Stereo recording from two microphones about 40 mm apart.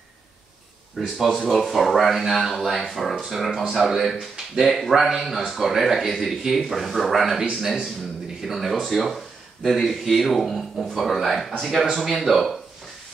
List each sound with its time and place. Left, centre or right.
1.1 s speech: centre
1.7 s speech: centre